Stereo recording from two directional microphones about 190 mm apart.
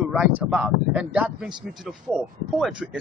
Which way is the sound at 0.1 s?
5° right (ahead or behind).